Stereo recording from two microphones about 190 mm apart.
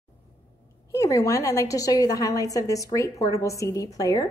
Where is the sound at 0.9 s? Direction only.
15° left (ahead or behind).